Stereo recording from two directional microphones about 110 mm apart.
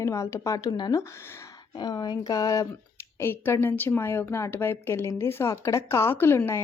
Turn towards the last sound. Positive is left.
turn(degrees=25)  # may be behind; listen again after turning